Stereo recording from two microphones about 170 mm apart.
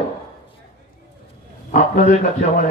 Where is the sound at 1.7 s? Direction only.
40° left (ahead or behind).